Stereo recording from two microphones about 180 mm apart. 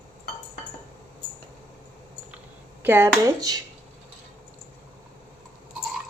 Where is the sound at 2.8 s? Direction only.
15° right (ahead or behind).